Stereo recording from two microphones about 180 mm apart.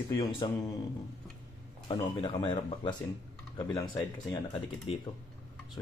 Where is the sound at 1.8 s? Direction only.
30° left (ahead or behind).